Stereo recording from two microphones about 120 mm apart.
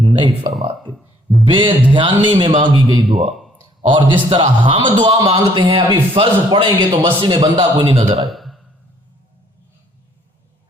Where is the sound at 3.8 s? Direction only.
45° right (ahead or behind).